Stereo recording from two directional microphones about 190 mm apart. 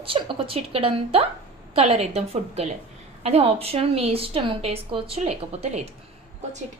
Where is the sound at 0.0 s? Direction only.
30° right (ahead or behind).